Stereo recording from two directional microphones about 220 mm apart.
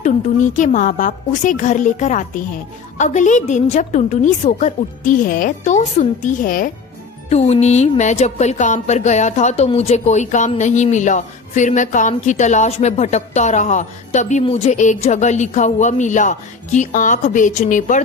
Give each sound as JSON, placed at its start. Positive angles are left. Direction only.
{"t": 0.0, "sound": "speech", "side_deg": 35}
{"t": 7.3, "sound": "speech", "side_deg": 30}